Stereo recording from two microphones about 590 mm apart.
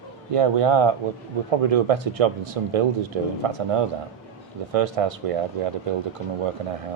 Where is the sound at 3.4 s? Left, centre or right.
Right.